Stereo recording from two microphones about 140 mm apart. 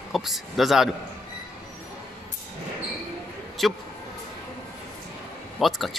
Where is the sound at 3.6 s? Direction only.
Centre (ahead or behind).